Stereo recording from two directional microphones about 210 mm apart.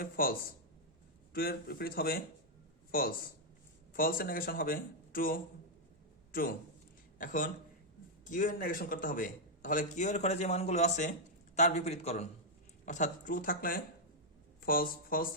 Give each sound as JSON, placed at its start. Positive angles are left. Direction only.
{"t": 0.0, "sound": "speech", "side_deg": 45}
{"t": 7.2, "sound": "a man's voice", "side_deg": 40}